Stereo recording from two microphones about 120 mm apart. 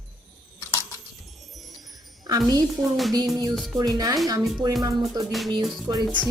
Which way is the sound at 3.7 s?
35° right (ahead or behind).